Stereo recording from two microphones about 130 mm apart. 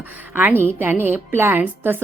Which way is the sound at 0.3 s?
15° right (ahead or behind).